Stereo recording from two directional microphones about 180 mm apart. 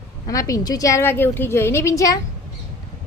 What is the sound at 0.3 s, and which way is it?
A woman's voice, 20° left (ahead or behind).